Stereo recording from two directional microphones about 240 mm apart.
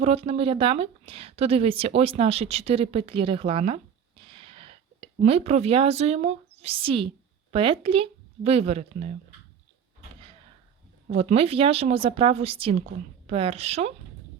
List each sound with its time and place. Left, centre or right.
0.0 s speech: right
11.1 s speech: right